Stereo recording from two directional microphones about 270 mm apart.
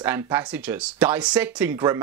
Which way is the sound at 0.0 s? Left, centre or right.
Centre.